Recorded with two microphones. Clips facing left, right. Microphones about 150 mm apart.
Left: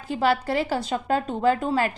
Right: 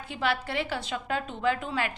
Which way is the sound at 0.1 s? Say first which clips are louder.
Left 7 dB; 40° left (ahead or behind).